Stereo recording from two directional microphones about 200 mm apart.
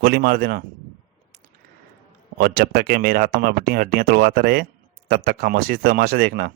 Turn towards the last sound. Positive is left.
turn(degrees=-50)  # may be behind; listen again after turning